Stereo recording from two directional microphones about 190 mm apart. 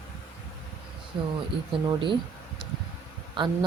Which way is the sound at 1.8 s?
25° right (ahead or behind).